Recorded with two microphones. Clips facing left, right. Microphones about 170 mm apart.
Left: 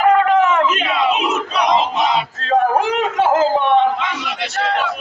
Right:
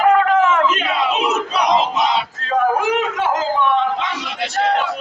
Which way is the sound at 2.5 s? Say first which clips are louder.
Left 1 dB; 35° left (ahead or behind).